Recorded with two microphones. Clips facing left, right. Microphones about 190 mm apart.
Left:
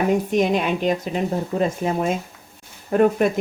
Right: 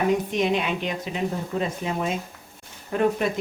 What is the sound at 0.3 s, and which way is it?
Speech, 45° left (ahead or behind).